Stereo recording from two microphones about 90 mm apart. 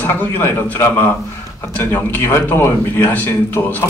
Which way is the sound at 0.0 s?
20° left (ahead or behind).